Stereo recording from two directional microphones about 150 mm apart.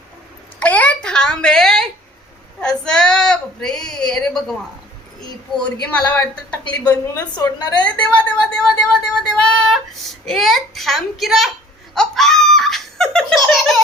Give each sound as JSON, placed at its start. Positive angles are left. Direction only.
{"t": 0.6, "sound": "a sound", "side_deg": 10}
{"t": 5.9, "sound": "a woman's voice", "side_deg": 10}
{"t": 6.9, "sound": "a woman's voice", "side_deg": 25}
{"t": 7.8, "sound": "a woman's voice", "side_deg": 10}
{"t": 9.0, "sound": "child singing", "side_deg": 5}
{"t": 11.9, "sound": "laughter", "side_deg": 5}